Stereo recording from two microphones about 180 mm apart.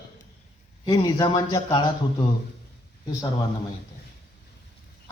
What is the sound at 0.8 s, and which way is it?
A man's voice, 20° left (ahead or behind).